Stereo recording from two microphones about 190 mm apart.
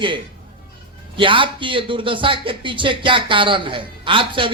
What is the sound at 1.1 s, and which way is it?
A man's voice, 25° right (ahead or behind).